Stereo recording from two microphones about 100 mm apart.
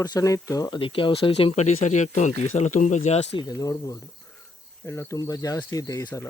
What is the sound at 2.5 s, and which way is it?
Speech, 90° left.